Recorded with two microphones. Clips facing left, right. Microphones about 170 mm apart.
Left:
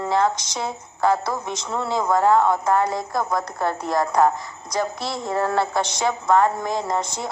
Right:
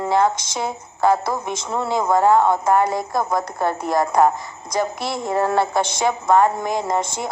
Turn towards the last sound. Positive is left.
turn(degrees=-20)  # may be behind; listen again after turning